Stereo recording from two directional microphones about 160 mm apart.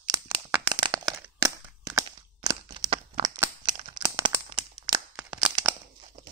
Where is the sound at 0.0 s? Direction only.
25° right (ahead or behind).